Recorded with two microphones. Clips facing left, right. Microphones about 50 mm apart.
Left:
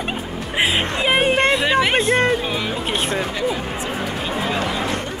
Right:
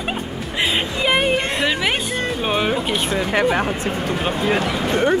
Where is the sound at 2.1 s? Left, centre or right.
Left.